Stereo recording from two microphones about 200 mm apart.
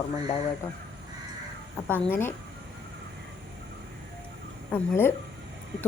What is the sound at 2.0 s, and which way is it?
Speech, 10° left (ahead or behind).